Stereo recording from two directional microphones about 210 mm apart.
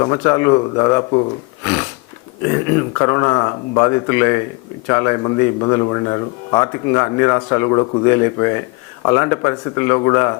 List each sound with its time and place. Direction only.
0.0 s speech: 15° left (ahead or behind)
1.6 s a sound: 10° left (ahead or behind)
2.5 s speech: 15° left (ahead or behind)